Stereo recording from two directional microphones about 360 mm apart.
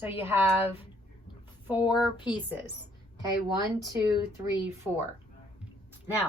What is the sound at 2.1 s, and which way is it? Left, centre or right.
Speech, centre.